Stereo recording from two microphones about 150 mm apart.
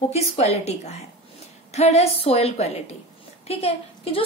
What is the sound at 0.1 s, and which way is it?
A woman's voice, 45° left (ahead or behind).